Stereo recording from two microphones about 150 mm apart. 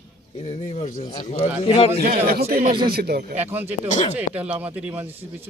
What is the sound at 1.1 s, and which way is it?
Speech, 30° left (ahead or behind).